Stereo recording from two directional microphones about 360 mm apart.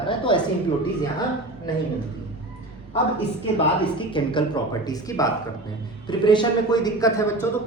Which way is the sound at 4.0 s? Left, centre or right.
Centre.